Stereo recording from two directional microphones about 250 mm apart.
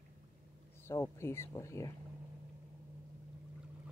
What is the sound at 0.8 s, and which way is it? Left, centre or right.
Speech, centre.